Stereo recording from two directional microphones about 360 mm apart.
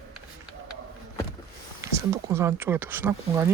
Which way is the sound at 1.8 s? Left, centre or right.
Centre.